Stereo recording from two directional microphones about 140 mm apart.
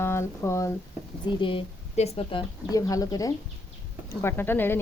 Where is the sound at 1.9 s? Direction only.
45° left (ahead or behind).